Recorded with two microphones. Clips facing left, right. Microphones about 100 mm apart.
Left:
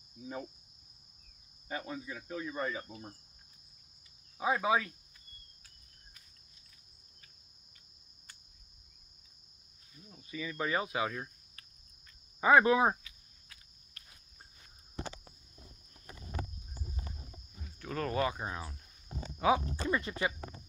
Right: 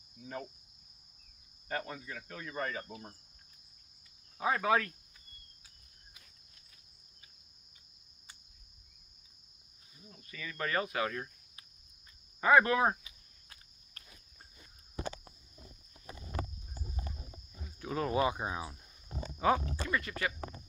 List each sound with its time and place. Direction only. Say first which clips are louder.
1.7 s speech: right 1 dB; 15° left (ahead or behind)
4.4 s speech: even; 10° left (ahead or behind)
10.2 s speech: left 3 dB; 10° left (ahead or behind)
12.4 s speech: left 1 dB; 15° left (ahead or behind)
13.0 s walk: even; 30° right (ahead or behind)
17.6 s speech: right 2 dB; 10° right (ahead or behind)
19.3 s wild animals: left 1 dB; centre (ahead or behind)
19.9 s speech: left 2 dB; 25° left (ahead or behind)